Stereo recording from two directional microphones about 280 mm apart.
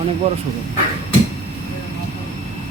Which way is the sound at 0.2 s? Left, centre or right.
Right.